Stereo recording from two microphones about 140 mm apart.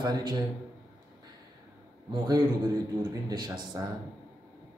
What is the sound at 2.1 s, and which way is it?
A man's voice, 30° right (ahead or behind).